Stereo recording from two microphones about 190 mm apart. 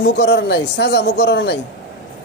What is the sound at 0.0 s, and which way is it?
Speech, 65° left (ahead or behind).